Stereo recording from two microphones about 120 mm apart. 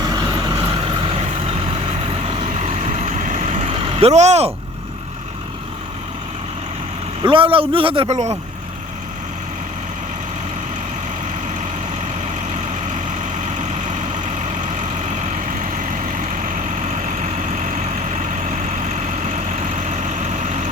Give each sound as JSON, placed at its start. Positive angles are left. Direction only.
{"t": 0.0, "sound": "vehicle", "side_deg": -35}
{"t": 0.3, "sound": "vehicle", "side_deg": -45}
{"t": 2.6, "sound": "vehicle", "side_deg": -65}
{"t": 7.3, "sound": "a man's voice", "side_deg": -45}
{"t": 8.0, "sound": "speech", "side_deg": -70}
{"t": 13.6, "sound": "vehicle", "side_deg": -80}